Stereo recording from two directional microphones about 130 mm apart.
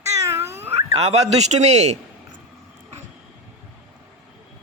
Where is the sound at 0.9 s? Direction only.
50° right (ahead or behind).